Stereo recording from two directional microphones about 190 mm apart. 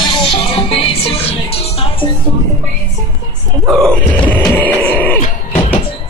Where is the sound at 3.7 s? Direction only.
5° left (ahead or behind).